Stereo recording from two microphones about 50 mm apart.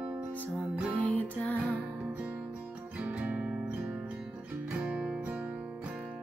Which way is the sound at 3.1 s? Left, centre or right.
Right.